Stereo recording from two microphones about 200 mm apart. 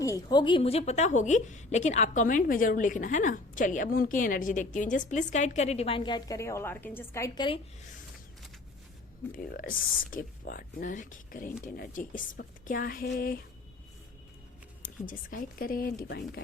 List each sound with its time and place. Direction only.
0.0 s a woman's voice: 20° left (ahead or behind)
9.3 s speech: 45° left (ahead or behind)
14.8 s speech: 45° left (ahead or behind)